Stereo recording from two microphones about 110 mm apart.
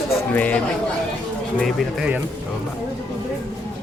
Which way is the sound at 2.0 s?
10° right (ahead or behind).